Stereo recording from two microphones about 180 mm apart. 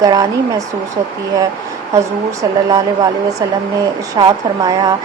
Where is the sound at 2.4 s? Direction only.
20° right (ahead or behind).